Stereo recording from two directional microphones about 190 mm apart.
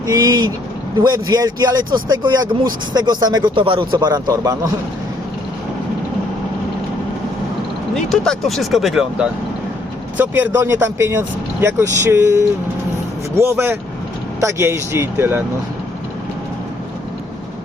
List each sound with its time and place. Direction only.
0.1 s speech: 20° right (ahead or behind)
7.9 s speech: 5° left (ahead or behind)